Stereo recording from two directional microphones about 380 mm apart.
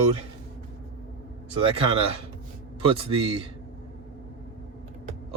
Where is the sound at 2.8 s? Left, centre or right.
Centre.